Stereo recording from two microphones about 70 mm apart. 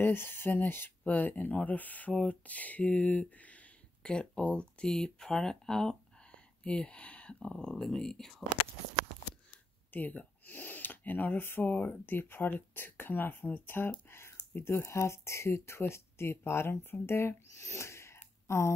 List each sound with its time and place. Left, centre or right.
0.0 s speech: left; by 8.5 s centre
9.8 s speech: left